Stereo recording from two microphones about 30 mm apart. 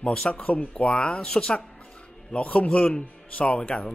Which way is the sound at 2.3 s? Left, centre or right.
Left.